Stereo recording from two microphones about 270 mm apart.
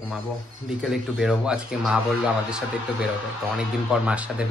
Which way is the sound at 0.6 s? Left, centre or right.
Centre.